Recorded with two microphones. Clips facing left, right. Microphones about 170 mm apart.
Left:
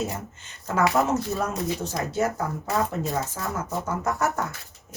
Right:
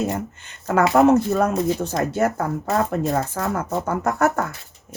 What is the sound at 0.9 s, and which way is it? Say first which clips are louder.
Speech: right 8 dB; 60° right (ahead or behind).